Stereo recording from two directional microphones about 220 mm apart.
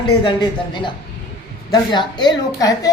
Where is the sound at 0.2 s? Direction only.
20° left (ahead or behind).